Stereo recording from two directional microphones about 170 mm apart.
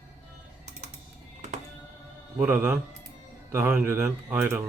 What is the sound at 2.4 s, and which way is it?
Speech, 10° right (ahead or behind).